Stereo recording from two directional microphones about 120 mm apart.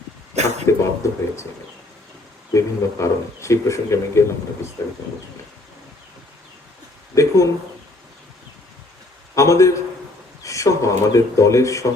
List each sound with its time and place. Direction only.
0.3 s a sound: 70° right (ahead or behind)
0.7 s a man's voice: 25° left (ahead or behind)
2.5 s a man's voice: 25° left (ahead or behind)
7.1 s a man's voice: 25° left (ahead or behind)
9.3 s a man's voice: 25° left (ahead or behind)